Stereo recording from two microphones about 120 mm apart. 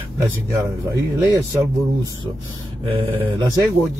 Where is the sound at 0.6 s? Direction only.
25° right (ahead or behind).